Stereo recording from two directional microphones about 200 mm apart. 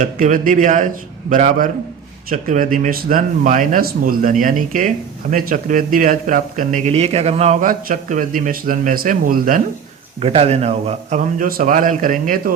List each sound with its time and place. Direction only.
0.0 s speech: 40° right (ahead or behind)
10.2 s speech: 30° right (ahead or behind)